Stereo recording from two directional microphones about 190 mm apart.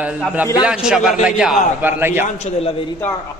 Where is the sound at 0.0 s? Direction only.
5° right (ahead or behind).